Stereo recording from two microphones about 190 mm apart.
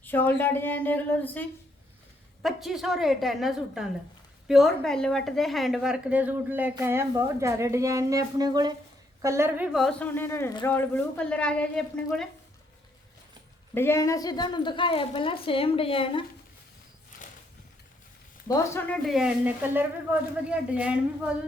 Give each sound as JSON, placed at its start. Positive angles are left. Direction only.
{"t": 0.0, "sound": "a woman's voice", "side_deg": 10}
{"t": 13.7, "sound": "a woman's voice", "side_deg": 15}
{"t": 18.4, "sound": "a woman's voice", "side_deg": 10}
{"t": 19.0, "sound": "a woman's voice", "side_deg": -5}